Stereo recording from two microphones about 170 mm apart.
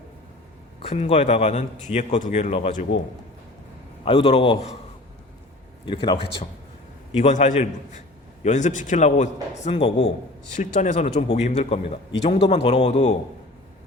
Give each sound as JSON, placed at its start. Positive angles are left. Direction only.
{"t": 0.8, "sound": "a man's voice", "side_deg": 40}
{"t": 4.0, "sound": "a man's voice", "side_deg": 30}
{"t": 5.8, "sound": "speech", "side_deg": 30}
{"t": 7.1, "sound": "a man's voice", "side_deg": 45}
{"t": 10.5, "sound": "a man's voice", "side_deg": 45}